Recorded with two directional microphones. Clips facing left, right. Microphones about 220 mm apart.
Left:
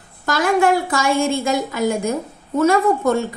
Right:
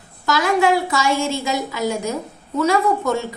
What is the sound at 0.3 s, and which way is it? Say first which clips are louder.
A woman's voice: left 1 dB; 50° left (ahead or behind).